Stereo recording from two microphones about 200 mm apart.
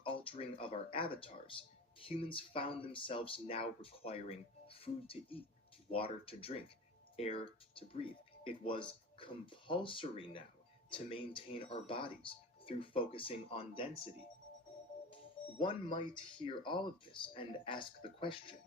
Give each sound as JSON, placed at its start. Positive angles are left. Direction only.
{"t": 0.0, "sound": "speech", "side_deg": 25}
{"t": 15.1, "sound": "speech", "side_deg": 25}